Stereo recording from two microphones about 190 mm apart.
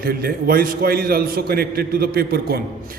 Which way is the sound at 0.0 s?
55° right (ahead or behind).